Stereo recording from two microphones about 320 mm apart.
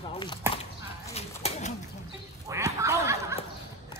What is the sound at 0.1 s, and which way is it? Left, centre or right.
Chop, centre.